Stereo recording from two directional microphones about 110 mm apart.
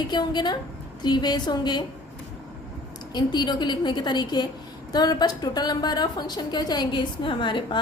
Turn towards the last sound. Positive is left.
turn(degrees=45)  # may be behind; listen again after turning